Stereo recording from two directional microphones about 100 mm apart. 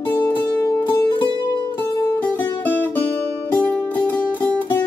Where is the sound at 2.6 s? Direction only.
15° left (ahead or behind).